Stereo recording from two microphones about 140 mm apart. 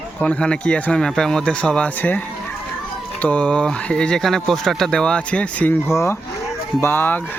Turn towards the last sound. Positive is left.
turn(degrees=15)  # may be behind; listen again after turning